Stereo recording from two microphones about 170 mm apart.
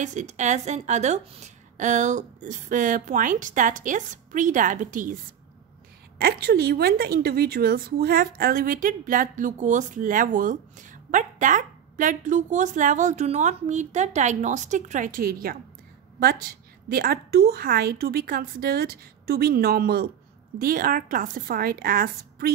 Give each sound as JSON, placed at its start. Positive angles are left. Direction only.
{"t": 0.0, "sound": "a woman's voice", "side_deg": -45}
{"t": 6.1, "sound": "a woman's voice", "side_deg": -65}
{"t": 16.9, "sound": "a woman's voice", "side_deg": -65}